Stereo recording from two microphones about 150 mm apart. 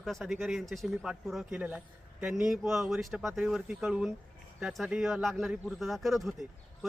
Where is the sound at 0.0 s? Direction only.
Centre (ahead or behind).